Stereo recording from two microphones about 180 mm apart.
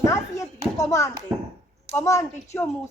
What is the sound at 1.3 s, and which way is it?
Speech, 5° right (ahead or behind).